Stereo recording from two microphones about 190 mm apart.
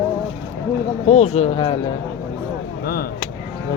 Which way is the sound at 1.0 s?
35° left (ahead or behind).